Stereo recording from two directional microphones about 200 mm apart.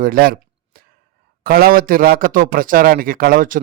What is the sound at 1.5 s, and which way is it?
Speech, 45° right (ahead or behind).